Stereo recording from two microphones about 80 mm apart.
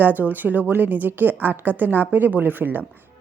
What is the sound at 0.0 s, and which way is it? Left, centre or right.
A woman's voice, right.